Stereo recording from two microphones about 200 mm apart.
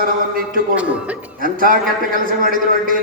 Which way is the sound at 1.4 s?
45° right (ahead or behind).